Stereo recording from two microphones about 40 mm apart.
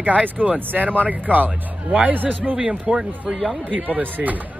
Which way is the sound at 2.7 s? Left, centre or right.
Right.